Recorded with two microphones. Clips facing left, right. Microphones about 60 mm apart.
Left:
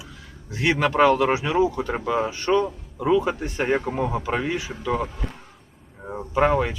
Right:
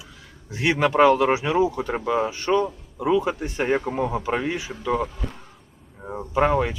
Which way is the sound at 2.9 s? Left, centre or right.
Centre.